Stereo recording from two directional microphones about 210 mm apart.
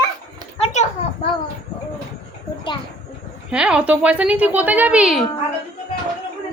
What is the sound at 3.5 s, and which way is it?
A woman's voice, 5° right (ahead or behind).